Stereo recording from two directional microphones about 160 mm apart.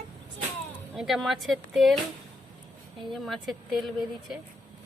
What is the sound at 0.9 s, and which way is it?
Speech, centre (ahead or behind).